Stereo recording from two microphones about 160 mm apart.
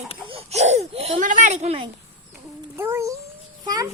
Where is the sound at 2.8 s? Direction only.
15° right (ahead or behind).